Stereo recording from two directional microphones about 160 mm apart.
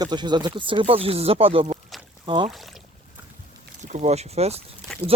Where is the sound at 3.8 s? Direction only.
45° right (ahead or behind).